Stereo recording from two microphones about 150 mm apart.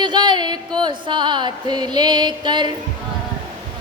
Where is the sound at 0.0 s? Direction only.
30° right (ahead or behind).